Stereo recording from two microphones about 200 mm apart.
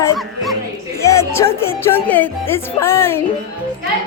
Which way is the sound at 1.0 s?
15° left (ahead or behind).